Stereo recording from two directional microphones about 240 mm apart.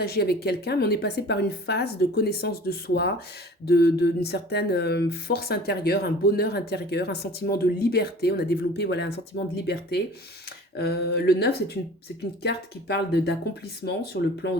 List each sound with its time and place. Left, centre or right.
0.0 s speech: left